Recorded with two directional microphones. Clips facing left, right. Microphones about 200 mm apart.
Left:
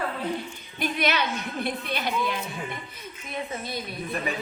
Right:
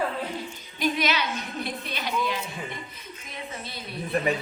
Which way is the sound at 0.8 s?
55° left (ahead or behind).